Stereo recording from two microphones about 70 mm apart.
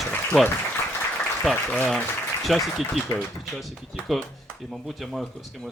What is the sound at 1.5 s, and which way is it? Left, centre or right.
Speech, left.